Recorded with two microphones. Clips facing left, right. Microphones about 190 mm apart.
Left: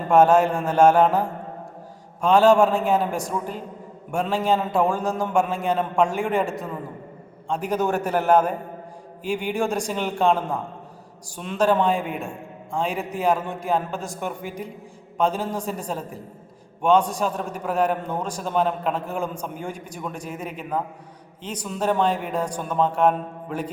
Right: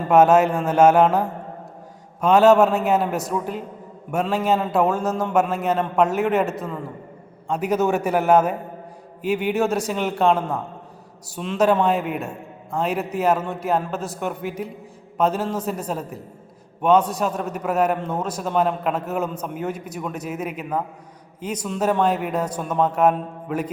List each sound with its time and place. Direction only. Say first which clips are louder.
0.1 s a man's voice: right 1 dB; 5° right (ahead or behind)
2.2 s a man's voice: right 2 dB; 5° right (ahead or behind)